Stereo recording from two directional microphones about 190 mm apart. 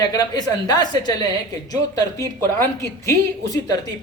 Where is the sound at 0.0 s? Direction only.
20° left (ahead or behind).